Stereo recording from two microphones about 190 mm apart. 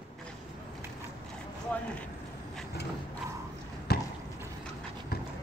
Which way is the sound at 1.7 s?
10° left (ahead or behind).